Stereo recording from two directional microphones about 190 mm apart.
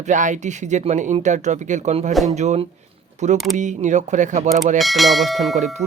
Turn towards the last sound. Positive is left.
turn(degrees=-40)  # may be behind; listen again after turning